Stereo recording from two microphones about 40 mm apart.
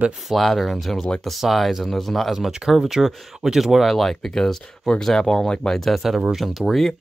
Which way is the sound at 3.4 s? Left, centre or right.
Centre.